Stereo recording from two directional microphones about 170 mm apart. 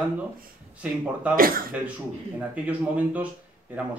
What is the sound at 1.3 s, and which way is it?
Speech, 55° right (ahead or behind).